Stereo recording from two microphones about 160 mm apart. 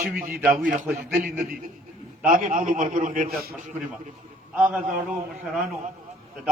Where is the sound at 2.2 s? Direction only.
55° right (ahead or behind).